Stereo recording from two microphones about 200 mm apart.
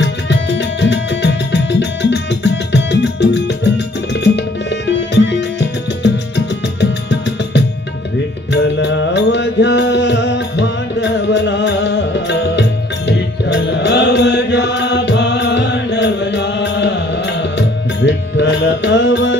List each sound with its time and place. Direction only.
0.0 s music: 60° left (ahead or behind)
8.7 s music: 60° left (ahead or behind)
13.5 s mantra: 60° left (ahead or behind)